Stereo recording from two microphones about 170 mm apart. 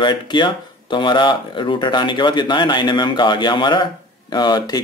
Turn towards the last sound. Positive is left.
turn(degrees=25)  # may be behind; listen again after turning